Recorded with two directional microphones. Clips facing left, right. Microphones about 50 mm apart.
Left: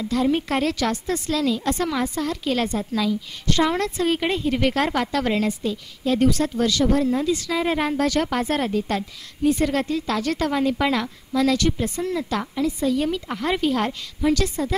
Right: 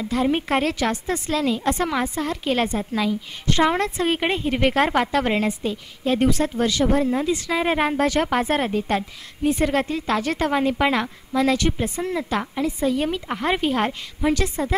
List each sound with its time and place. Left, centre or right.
0.0 s a woman's voice: right